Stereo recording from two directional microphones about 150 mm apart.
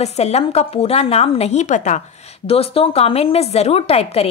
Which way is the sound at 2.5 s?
40° left (ahead or behind).